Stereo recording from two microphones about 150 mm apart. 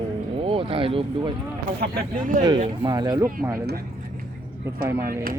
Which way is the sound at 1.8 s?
75° right (ahead or behind).